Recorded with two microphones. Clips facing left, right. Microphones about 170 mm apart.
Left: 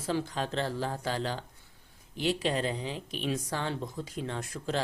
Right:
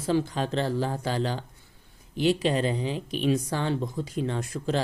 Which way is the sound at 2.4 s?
5° right (ahead or behind).